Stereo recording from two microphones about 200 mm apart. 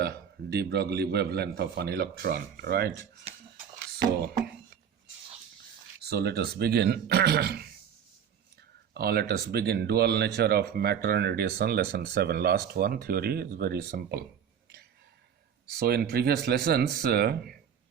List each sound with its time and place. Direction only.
0.0 s speech: 55° right (ahead or behind)
6.0 s speech: 55° right (ahead or behind)
8.9 s speech: 55° right (ahead or behind)
15.8 s speech: 50° right (ahead or behind)